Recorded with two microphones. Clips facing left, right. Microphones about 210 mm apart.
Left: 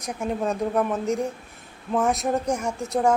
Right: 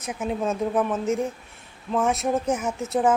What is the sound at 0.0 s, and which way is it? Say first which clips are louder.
A woman's voice: even; 5° right (ahead or behind).